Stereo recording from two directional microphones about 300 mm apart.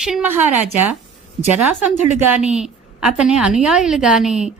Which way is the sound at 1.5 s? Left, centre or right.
Centre.